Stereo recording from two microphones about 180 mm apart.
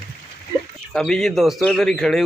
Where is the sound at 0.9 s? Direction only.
5° left (ahead or behind).